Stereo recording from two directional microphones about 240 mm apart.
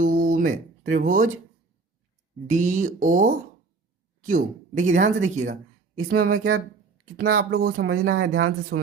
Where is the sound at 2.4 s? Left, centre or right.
Right.